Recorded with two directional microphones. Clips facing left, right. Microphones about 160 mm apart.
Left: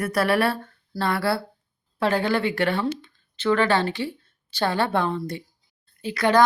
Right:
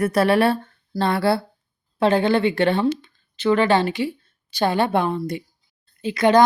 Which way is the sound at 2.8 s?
15° right (ahead or behind).